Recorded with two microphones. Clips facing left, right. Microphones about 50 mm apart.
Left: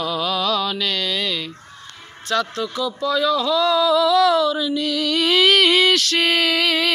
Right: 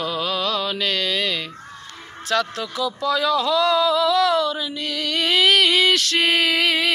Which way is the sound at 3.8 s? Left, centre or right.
Right.